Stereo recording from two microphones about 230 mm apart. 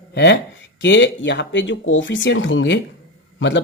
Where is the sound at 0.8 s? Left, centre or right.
Left.